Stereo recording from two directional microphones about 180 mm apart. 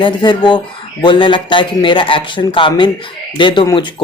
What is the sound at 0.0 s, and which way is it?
Speech, 25° left (ahead or behind).